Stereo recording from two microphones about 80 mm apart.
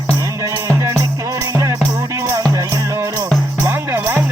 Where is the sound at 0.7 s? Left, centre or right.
Right.